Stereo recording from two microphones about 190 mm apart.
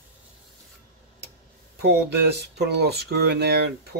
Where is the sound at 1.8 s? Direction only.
60° right (ahead or behind).